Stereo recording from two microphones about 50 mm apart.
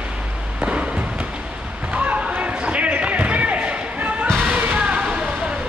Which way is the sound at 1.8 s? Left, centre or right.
Right.